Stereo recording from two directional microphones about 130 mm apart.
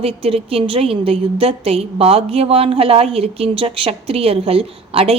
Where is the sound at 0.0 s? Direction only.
50° right (ahead or behind).